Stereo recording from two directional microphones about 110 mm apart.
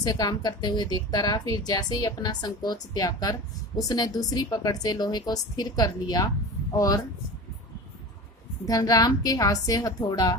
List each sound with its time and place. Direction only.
0.0 s a woman's voice: 35° left (ahead or behind)
8.6 s a woman's voice: 35° left (ahead or behind)